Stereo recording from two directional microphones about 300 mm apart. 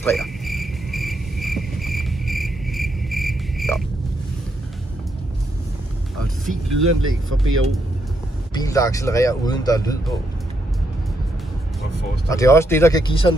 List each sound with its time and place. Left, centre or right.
0.0 s cricket: centre
6.9 s speech: right
8.5 s speech: centre
12.3 s speech: centre